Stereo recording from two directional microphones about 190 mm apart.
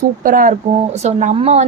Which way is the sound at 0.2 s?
45° right (ahead or behind).